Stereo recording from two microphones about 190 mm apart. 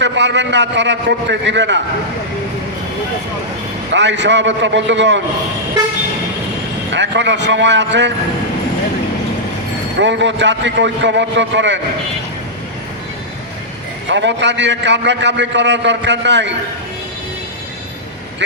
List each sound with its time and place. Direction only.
0.0 s a man's voice: 70° right (ahead or behind)
3.9 s a man's voice: 70° right (ahead or behind)
6.9 s a man's voice: 70° right (ahead or behind)
10.0 s a man's voice: 70° right (ahead or behind)
14.1 s a man's voice: 70° right (ahead or behind)